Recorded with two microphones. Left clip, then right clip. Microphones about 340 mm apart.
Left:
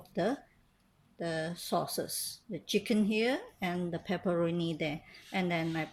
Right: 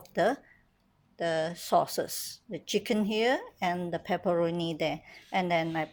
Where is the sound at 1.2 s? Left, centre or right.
Centre.